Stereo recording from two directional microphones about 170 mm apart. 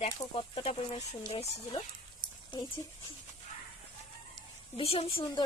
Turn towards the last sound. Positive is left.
turn(degrees=30)  # may be behind; listen again after turning